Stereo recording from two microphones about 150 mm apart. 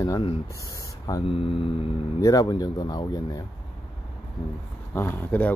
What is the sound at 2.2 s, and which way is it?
Speech, 25° left (ahead or behind).